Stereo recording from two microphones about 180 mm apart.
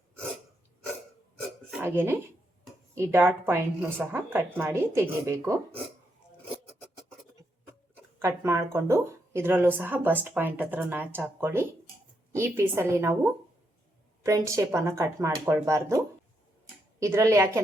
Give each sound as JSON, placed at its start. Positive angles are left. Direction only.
{"t": 1.8, "sound": "speech", "side_deg": -10}
{"t": 8.2, "sound": "speech", "side_deg": -15}